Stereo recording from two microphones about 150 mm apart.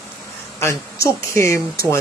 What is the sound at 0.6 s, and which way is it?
Speech, 20° left (ahead or behind).